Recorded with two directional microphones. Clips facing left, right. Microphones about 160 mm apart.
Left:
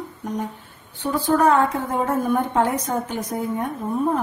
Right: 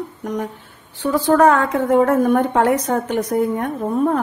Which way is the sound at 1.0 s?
80° right.